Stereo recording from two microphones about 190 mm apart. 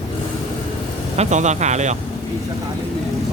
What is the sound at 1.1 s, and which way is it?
Speech, 35° right (ahead or behind).